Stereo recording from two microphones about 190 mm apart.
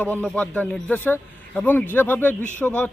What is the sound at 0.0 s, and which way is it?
A man's voice, 5° left (ahead or behind).